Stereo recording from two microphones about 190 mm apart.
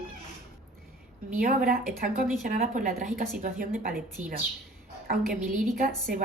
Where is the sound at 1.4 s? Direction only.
50° right (ahead or behind).